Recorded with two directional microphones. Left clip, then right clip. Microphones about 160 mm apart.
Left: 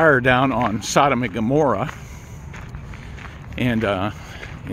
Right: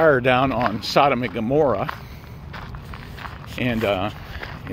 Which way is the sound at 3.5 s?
25° left (ahead or behind).